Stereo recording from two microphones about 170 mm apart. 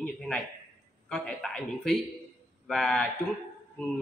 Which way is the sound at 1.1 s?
5° left (ahead or behind).